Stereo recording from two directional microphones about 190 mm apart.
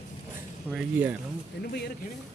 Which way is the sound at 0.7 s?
10° right (ahead or behind).